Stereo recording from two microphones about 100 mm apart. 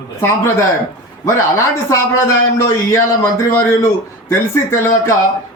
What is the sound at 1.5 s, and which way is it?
A man's voice, 25° left (ahead or behind).